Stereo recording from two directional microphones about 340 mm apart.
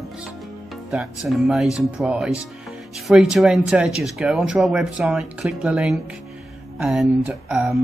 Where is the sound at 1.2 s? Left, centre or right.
Centre.